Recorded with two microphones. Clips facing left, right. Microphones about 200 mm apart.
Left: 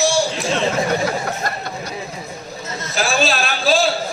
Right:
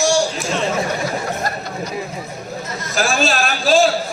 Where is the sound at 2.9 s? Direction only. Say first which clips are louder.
Right 1 dB; 45° right (ahead or behind).